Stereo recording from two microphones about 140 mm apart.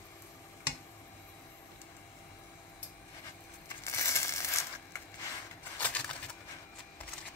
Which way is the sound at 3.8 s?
20° left (ahead or behind).